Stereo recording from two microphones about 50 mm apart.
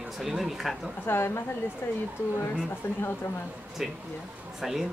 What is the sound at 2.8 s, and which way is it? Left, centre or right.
Speech, left.